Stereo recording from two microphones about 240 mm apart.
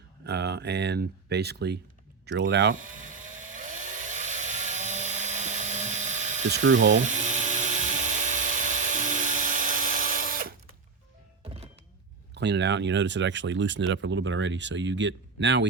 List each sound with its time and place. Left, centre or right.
0.3 s speech: right
3.0 s chainsaw: right
6.7 s electric toothbrush: right
12.3 s speech: right